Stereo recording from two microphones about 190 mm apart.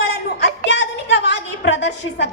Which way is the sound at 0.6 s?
70° left (ahead or behind).